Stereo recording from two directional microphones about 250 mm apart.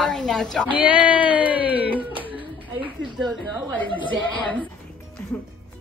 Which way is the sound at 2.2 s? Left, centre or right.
Centre.